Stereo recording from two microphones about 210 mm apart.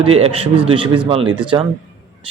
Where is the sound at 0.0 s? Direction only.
25° right (ahead or behind).